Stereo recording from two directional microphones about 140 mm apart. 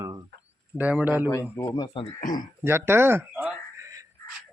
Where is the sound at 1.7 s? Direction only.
35° left (ahead or behind).